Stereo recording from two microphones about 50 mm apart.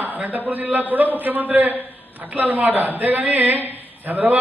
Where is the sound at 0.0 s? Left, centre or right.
Right.